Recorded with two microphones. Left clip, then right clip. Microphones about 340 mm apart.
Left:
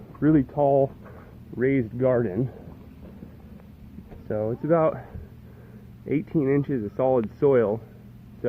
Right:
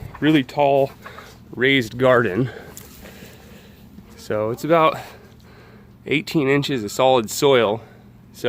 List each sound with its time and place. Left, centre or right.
0.2 s speech: right
4.3 s speech: right
6.1 s speech: right